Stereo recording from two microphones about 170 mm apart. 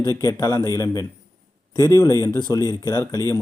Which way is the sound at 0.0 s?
20° left (ahead or behind).